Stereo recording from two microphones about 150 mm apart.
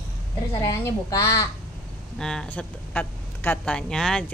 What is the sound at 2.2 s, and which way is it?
Speech, 5° left (ahead or behind).